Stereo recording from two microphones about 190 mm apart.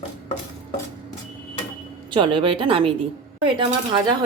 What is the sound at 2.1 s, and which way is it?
A woman's voice, 25° right (ahead or behind).